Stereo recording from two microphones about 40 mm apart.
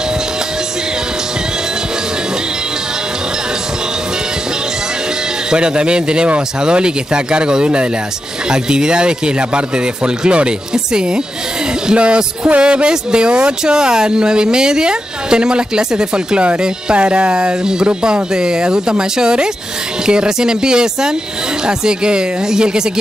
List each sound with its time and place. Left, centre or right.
5.5 s speech: right